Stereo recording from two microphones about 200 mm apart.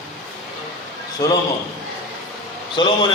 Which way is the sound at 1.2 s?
15° left (ahead or behind).